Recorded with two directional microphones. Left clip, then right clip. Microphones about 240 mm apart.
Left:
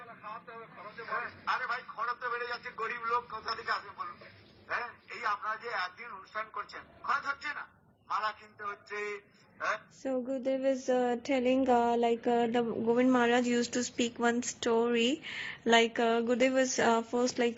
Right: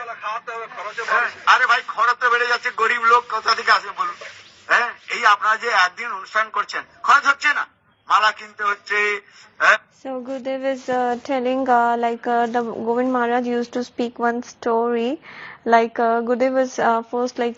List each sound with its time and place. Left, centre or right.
0.0 s a woman's voice: right
10.0 s speech: centre